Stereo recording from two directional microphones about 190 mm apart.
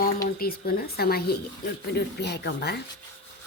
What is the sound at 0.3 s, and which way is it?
Speech, 55° left (ahead or behind).